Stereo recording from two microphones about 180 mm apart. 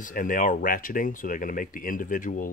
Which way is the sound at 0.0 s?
50° left (ahead or behind).